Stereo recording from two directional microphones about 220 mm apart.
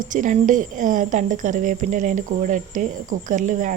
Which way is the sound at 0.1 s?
35° right (ahead or behind).